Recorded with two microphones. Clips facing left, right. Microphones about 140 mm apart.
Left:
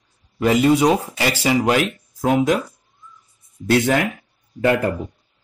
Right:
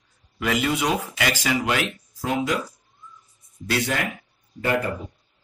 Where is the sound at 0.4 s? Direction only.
35° left (ahead or behind).